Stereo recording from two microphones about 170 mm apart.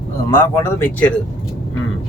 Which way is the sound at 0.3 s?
10° left (ahead or behind).